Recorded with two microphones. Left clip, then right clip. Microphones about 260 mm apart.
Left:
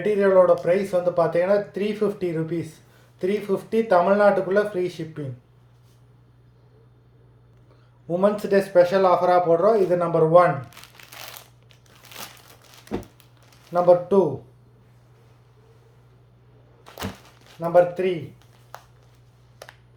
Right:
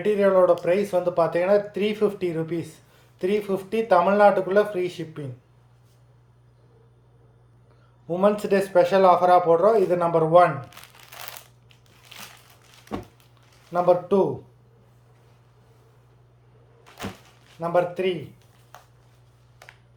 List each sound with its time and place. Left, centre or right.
0.0 s speech: centre
8.1 s speech: centre
12.9 s a sound: centre
13.7 s speech: centre
17.6 s speech: centre
19.6 s a sound: left